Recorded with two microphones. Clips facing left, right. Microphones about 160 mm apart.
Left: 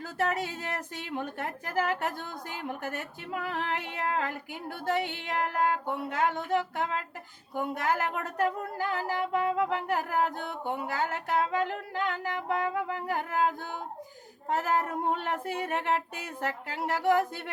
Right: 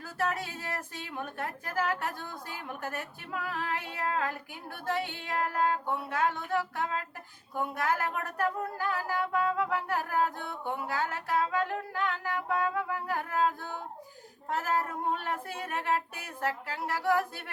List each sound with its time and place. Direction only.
0.2 s a woman's voice: 20° left (ahead or behind)